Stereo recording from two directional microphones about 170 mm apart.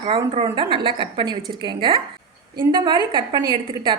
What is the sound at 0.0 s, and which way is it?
A woman's voice, 35° right (ahead or behind).